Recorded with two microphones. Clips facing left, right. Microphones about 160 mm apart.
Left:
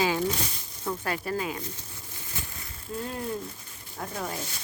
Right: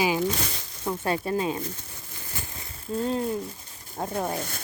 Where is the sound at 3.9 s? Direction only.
30° right (ahead or behind).